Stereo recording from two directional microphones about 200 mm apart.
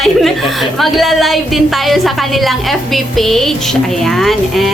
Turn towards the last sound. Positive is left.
turn(degrees=0)  # may be behind; listen again after turning